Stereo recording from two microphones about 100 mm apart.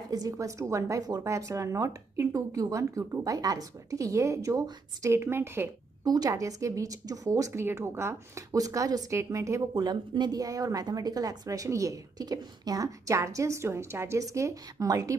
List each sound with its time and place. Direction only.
0.1 s speech: 35° right (ahead or behind)
6.0 s speech: 40° right (ahead or behind)